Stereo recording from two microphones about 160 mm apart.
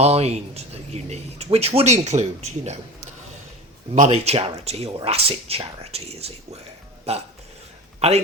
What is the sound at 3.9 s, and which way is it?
Speech, 50° right (ahead or behind).